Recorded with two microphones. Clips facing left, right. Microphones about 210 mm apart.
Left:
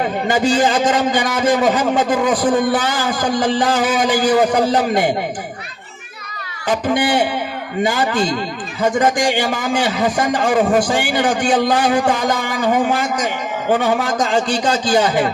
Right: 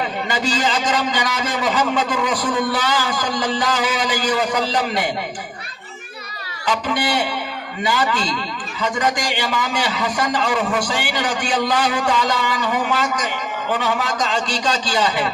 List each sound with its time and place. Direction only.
0.0 s a man's voice: 50° left (ahead or behind)
6.7 s a man's voice: 50° left (ahead or behind)